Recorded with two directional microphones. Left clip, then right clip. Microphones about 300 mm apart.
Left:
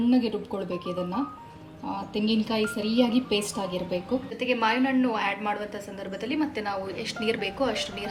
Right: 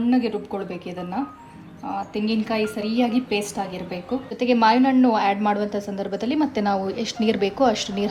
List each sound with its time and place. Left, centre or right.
0.1 s a woman's voice: centre
4.4 s a woman's voice: right